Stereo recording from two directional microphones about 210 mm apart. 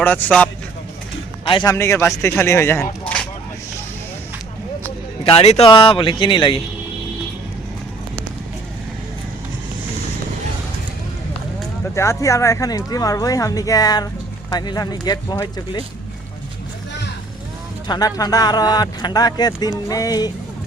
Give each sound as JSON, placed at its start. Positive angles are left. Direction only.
{"t": 0.0, "sound": "speech", "side_deg": 10}
{"t": 1.5, "sound": "speech", "side_deg": 25}
{"t": 1.7, "sound": "speech", "side_deg": 10}
{"t": 5.2, "sound": "speech", "side_deg": 30}
{"t": 11.9, "sound": "speech", "side_deg": 15}
{"t": 17.8, "sound": "speech", "side_deg": 20}